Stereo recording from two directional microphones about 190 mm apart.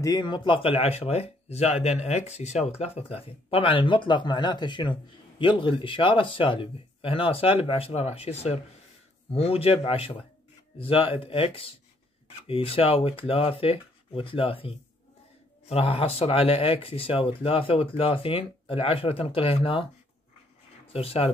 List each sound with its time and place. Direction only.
0.0 s speech: 20° left (ahead or behind)